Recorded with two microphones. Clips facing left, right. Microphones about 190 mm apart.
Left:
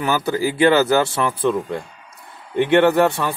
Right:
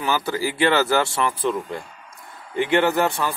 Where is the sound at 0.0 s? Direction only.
60° left (ahead or behind).